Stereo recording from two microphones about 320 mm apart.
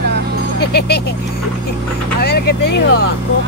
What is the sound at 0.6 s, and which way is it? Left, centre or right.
Speech, left.